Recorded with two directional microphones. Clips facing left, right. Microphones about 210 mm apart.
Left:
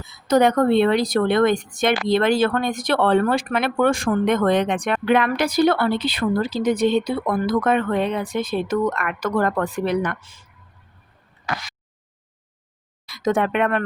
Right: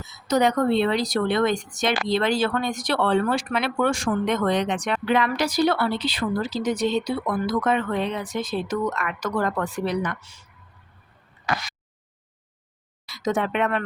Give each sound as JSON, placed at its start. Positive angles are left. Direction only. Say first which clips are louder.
{"t": 0.0, "sound": "speech", "louder": "left 4 dB", "side_deg": 55}
{"t": 13.1, "sound": "speech", "louder": "left 4 dB", "side_deg": 55}